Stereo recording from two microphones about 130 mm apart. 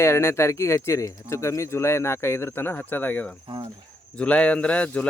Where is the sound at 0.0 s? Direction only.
20° left (ahead or behind).